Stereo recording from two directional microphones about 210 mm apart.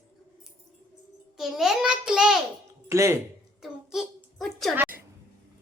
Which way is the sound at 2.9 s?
15° right (ahead or behind).